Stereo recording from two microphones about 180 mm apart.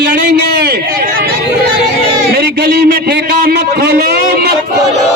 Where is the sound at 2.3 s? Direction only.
65° right (ahead or behind).